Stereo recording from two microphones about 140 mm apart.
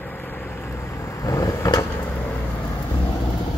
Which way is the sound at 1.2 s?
25° left (ahead or behind).